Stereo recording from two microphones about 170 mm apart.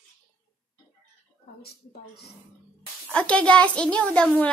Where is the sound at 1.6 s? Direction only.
70° left (ahead or behind).